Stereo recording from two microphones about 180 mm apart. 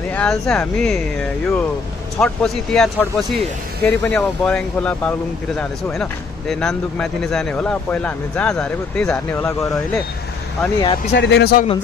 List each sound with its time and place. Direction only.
0.1 s speech: 5° left (ahead or behind)
9.3 s speech: 15° left (ahead or behind)
10.8 s speech: 30° left (ahead or behind)
11.1 s speech: 70° left (ahead or behind)